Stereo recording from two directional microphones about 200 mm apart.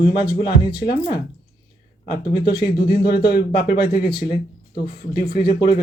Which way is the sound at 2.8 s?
55° left (ahead or behind).